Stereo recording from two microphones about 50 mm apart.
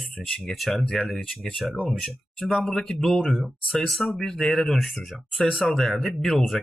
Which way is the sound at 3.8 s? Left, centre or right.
Centre.